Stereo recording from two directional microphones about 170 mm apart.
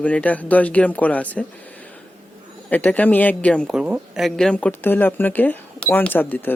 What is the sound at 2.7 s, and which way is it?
Speech, 10° left (ahead or behind).